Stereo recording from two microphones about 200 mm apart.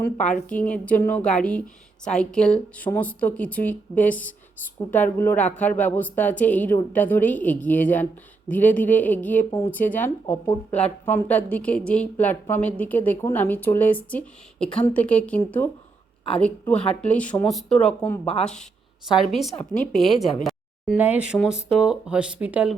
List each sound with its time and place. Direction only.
0.3 s a woman's voice: 5° left (ahead or behind)
10.7 s a woman's voice: 35° left (ahead or behind)
11.0 s a woman's voice: 10° left (ahead or behind)
19.5 s a woman's voice: 40° left (ahead or behind)
20.4 s speech: centre (ahead or behind)